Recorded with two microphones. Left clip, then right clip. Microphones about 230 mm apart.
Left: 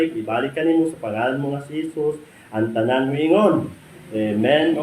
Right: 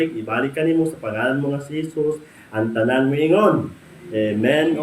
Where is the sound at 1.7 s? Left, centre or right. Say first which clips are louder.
Even; centre.